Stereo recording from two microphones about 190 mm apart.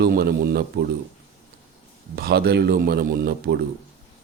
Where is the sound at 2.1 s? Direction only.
55° right (ahead or behind).